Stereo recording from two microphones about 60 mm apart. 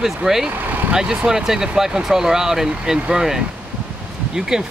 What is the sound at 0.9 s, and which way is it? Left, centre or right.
Speech, centre.